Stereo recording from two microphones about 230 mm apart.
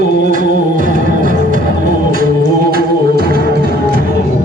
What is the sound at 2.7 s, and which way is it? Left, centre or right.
Music, right.